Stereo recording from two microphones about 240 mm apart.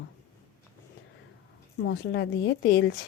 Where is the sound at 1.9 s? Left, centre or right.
Left.